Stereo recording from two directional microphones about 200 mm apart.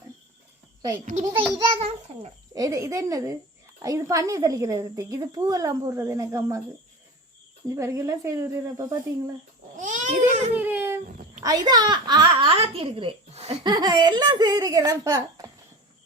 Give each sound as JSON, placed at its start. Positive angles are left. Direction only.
{"t": 1.2, "sound": "a woman's voice", "side_deg": -20}
{"t": 7.8, "sound": "a woman's voice", "side_deg": -15}
{"t": 9.7, "sound": "babbling", "side_deg": -40}
{"t": 10.5, "sound": "a child's voice", "side_deg": -10}
{"t": 13.7, "sound": "a woman's voice", "side_deg": -20}